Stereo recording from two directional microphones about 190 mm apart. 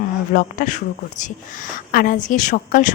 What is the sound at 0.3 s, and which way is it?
Speech, 45° left (ahead or behind).